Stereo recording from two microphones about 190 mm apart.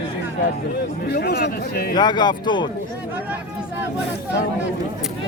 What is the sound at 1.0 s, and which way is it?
Speech, 55° left (ahead or behind).